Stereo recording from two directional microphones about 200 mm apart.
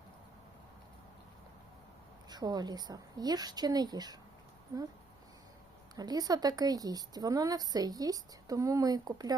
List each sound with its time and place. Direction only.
2.3 s a woman's voice: 20° right (ahead or behind)
6.0 s a woman's voice: 20° right (ahead or behind)